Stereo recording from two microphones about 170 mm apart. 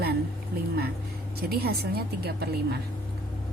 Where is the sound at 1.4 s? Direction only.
65° right (ahead or behind).